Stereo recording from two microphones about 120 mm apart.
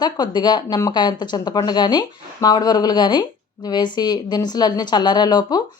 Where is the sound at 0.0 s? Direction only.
35° left (ahead or behind).